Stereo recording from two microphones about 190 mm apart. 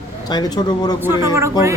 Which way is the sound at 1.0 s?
15° right (ahead or behind).